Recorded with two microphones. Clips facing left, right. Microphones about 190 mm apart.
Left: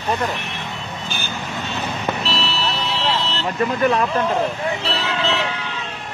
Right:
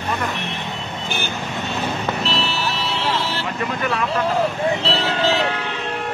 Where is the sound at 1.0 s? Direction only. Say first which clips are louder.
Right 6 dB; 65° right (ahead or behind).